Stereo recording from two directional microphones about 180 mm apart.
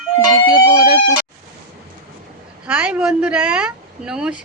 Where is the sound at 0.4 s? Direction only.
30° right (ahead or behind).